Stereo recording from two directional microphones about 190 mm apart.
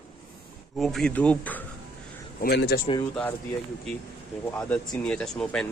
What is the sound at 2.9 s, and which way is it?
Speech, 30° left (ahead or behind).